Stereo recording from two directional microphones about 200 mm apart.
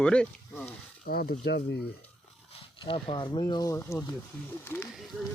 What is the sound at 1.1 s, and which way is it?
Speech, 50° left (ahead or behind).